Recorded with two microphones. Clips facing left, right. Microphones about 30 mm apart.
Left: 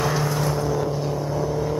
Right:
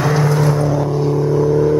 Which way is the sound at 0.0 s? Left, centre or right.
Centre.